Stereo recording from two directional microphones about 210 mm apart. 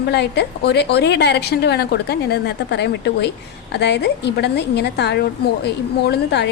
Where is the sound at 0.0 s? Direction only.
55° left (ahead or behind).